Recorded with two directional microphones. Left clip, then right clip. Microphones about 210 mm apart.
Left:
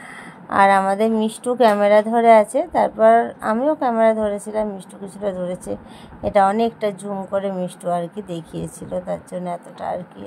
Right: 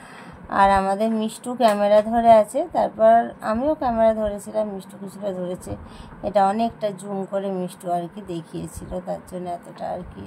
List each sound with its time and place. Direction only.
0.5 s speech: 15° left (ahead or behind)